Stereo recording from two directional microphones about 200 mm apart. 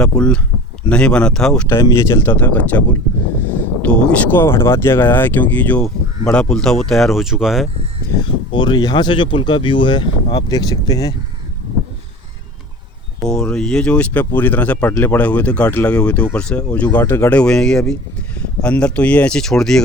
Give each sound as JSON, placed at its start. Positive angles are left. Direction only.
{"t": 0.0, "sound": "speech", "side_deg": 5}
{"t": 1.8, "sound": "speech", "side_deg": 15}
{"t": 3.8, "sound": "speech", "side_deg": 10}
{"t": 8.2, "sound": "speech", "side_deg": 25}
{"t": 13.2, "sound": "speech", "side_deg": 5}